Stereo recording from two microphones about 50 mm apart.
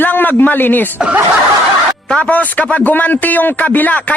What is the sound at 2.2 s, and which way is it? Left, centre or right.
A man's voice, left.